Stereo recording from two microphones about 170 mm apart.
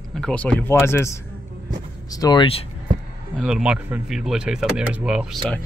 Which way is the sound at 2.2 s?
25° left (ahead or behind).